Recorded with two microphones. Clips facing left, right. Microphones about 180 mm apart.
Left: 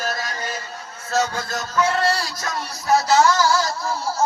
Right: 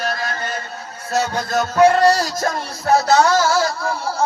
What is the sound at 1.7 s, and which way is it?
Music, 40° right (ahead or behind).